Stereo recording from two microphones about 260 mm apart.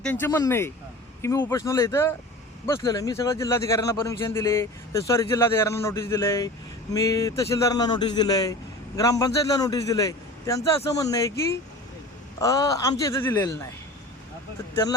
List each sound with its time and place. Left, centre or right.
0.0 s speech: centre
12.4 s speech: centre